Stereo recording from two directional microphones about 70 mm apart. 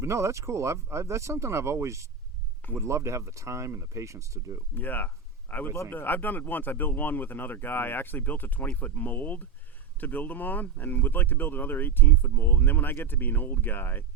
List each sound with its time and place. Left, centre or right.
0.0 s speech: right
4.7 s speech: left